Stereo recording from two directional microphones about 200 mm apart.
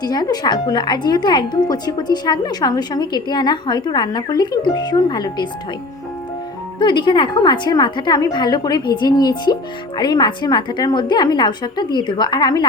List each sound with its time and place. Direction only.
0.0 s speech: 20° left (ahead or behind)
6.7 s speech: 25° left (ahead or behind)